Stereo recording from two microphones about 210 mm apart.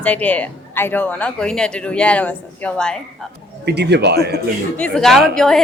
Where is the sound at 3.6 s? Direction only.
55° right (ahead or behind).